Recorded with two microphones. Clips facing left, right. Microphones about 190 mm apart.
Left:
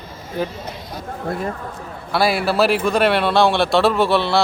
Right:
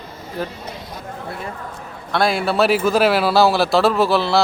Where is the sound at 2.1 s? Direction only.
5° left (ahead or behind).